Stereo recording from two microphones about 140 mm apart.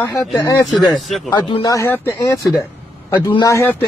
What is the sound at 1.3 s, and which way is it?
Speech, 30° left (ahead or behind).